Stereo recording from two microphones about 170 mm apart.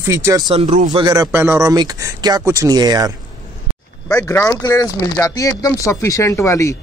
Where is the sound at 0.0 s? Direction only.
15° right (ahead or behind).